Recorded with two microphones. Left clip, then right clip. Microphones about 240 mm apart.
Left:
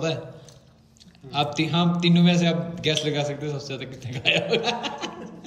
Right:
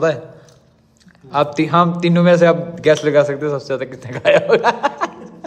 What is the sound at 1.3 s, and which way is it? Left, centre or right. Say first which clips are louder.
A man's voice: right 10 dB; centre.